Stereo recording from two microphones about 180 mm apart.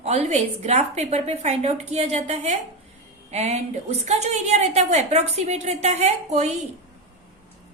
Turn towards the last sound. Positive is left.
turn(degrees=-40)  # may be behind; listen again after turning